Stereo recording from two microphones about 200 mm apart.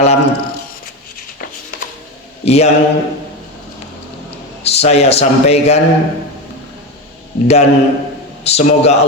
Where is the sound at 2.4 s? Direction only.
30° left (ahead or behind).